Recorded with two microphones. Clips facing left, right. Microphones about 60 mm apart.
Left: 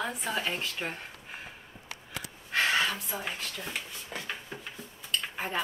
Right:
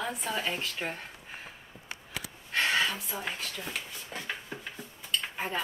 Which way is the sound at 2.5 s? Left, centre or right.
Centre.